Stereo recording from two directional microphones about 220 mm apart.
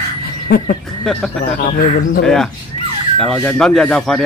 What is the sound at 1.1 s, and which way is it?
Speech, centre (ahead or behind).